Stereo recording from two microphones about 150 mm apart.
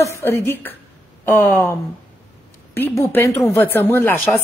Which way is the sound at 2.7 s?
15° left (ahead or behind).